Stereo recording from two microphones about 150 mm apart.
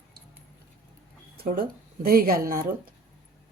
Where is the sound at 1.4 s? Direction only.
80° right.